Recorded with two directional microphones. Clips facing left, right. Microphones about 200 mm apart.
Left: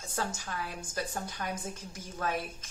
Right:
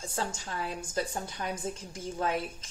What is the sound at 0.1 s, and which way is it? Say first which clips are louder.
Speech: left 1 dB; 25° right (ahead or behind).